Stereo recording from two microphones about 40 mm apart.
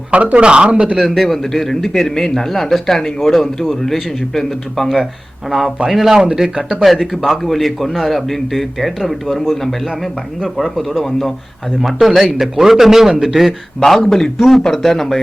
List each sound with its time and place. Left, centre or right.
0.1 s speech: right
1.0 s speech: centre
5.5 s speech: centre
6.8 s speech: centre
10.6 s speech: centre
13.7 s speech: centre